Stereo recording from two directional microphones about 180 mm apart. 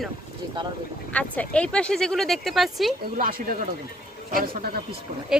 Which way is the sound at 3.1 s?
50° right (ahead or behind).